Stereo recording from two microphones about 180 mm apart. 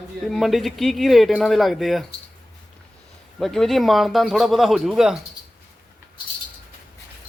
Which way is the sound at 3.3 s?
Centre (ahead or behind).